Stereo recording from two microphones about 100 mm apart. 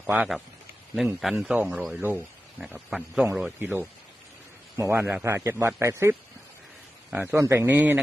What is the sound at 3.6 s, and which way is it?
A man's voice, 20° right (ahead or behind).